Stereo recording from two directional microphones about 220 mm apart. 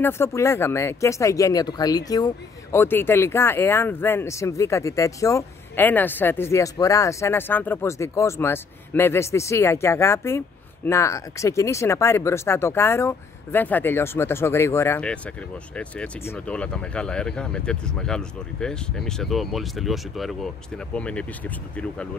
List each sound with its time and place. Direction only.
0.0 s speech: 10° left (ahead or behind)